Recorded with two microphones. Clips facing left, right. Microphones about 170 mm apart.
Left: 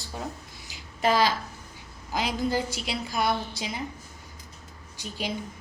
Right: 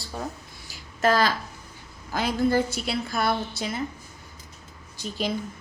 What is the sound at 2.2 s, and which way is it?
Speech, 50° right (ahead or behind).